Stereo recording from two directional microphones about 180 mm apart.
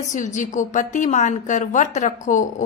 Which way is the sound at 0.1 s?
45° left (ahead or behind).